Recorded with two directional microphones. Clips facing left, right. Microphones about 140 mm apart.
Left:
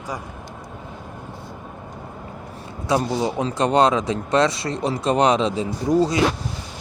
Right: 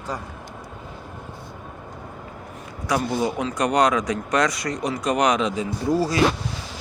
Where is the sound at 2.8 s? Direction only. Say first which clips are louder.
Left 2 dB; 25° left (ahead or behind).